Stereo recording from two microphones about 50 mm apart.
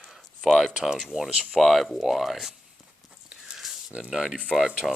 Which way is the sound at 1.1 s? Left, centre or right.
Centre.